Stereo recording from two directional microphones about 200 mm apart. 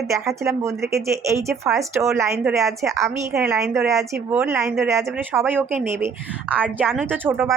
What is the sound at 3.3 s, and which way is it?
Speech, 5° right (ahead or behind).